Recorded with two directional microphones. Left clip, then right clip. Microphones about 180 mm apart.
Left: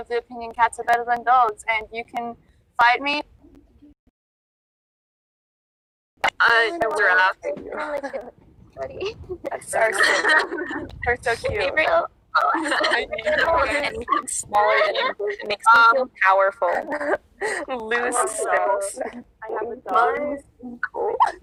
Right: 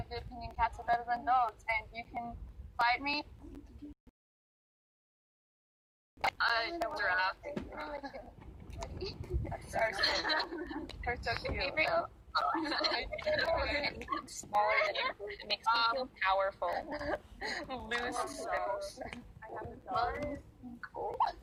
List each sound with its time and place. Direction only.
0.1 s speech: 45° left (ahead or behind)
6.2 s speech: 45° left (ahead or behind)